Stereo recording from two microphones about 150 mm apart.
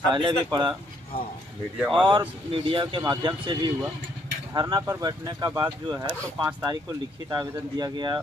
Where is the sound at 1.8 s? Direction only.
5° right (ahead or behind).